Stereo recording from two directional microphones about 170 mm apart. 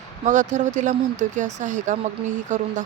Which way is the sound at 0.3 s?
45° right (ahead or behind).